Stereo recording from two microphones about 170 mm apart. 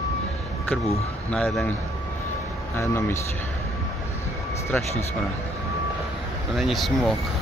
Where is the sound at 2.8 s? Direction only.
15° left (ahead or behind).